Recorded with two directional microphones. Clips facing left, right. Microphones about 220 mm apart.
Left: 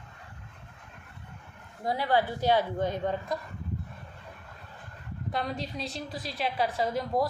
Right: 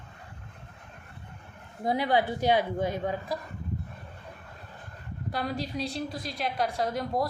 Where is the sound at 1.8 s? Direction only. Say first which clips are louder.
Right 1 dB; 20° right (ahead or behind).